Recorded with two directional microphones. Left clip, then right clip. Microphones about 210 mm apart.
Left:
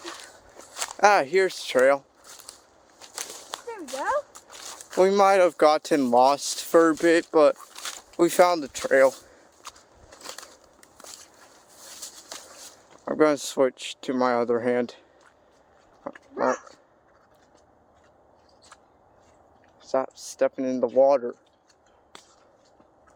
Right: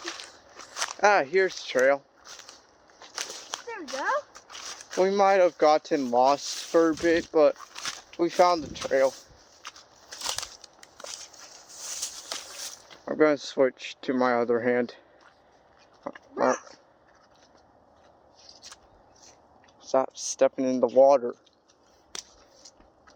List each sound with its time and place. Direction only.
0.9 s speech: 25° left (ahead or behind)
3.9 s speech: 5° left (ahead or behind)
4.4 s a sound: 5° left (ahead or behind)
4.9 s speech: 30° left (ahead or behind)
7.5 s a sound: 5° left (ahead or behind)
8.1 s speech: 35° left (ahead or behind)
9.6 s a sound: 10° left (ahead or behind)
10.2 s bird flight: 50° right (ahead or behind)
10.8 s walk: 10° right (ahead or behind)
12.3 s walk: 25° right (ahead or behind)
13.1 s speech: 20° left (ahead or behind)
16.0 s dog: centre (ahead or behind)
19.8 s speech: 5° right (ahead or behind)
22.1 s a sound: 55° right (ahead or behind)